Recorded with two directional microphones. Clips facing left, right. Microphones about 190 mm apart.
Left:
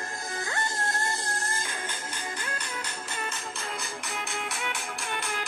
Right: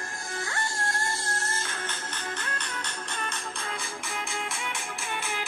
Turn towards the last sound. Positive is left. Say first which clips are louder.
# even
turn(degrees=-5)  # may be behind; listen again after turning